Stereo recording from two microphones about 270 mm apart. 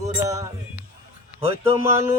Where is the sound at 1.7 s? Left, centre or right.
Centre.